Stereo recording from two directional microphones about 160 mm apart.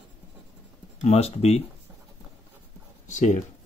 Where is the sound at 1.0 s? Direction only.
40° left (ahead or behind).